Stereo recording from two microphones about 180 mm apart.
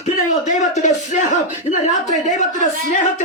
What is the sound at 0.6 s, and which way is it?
Speech, 40° left (ahead or behind).